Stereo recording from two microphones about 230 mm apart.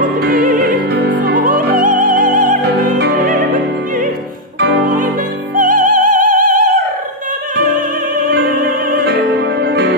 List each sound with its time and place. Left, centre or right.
0.0 s opera: right
4.6 s music: right
8.5 s music: right